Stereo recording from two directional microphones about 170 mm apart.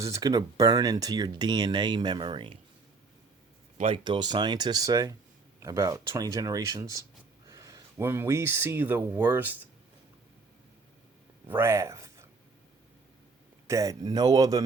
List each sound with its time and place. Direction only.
0.0 s speech: 20° right (ahead or behind)
3.8 s speech: 30° right (ahead or behind); by 9.6 s 10° right (ahead or behind)
11.4 s a sound: 15° right (ahead or behind)
13.7 s speech: 20° right (ahead or behind)